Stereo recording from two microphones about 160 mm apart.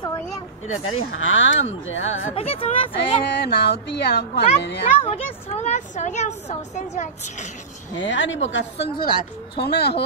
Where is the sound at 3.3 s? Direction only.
90° left.